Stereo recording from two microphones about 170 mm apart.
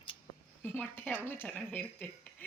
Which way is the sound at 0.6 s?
10° left (ahead or behind).